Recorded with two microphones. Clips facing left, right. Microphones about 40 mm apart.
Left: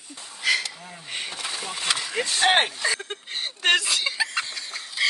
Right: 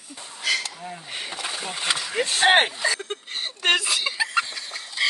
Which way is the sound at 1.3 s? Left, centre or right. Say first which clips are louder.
Right 1 dB; centre.